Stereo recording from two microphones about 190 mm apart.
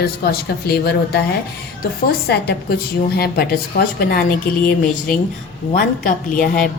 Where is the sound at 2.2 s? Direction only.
55° left (ahead or behind).